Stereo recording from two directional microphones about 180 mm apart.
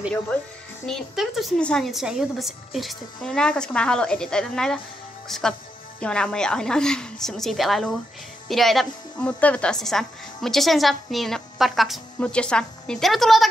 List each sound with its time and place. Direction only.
0.8 s a woman's voice: centre (ahead or behind)